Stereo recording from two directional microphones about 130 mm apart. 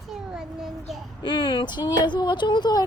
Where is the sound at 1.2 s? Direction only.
40° left (ahead or behind).